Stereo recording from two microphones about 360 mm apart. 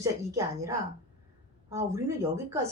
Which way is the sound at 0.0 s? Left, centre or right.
Centre.